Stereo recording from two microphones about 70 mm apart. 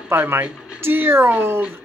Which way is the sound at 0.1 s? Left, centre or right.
Right.